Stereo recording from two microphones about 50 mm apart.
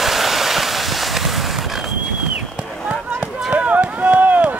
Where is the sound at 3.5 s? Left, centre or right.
Right.